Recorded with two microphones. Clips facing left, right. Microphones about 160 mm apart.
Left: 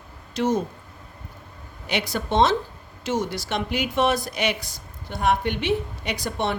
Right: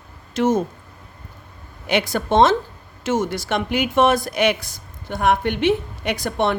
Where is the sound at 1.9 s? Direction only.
55° right (ahead or behind).